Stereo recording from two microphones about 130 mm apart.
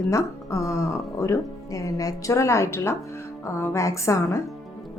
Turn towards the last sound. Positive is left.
turn(degrees=25)  # may be behind; listen again after turning